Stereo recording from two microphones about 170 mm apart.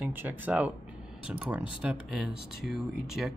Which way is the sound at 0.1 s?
10° right (ahead or behind).